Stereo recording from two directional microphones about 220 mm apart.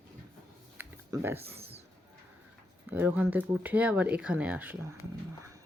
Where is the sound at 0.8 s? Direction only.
10° right (ahead or behind).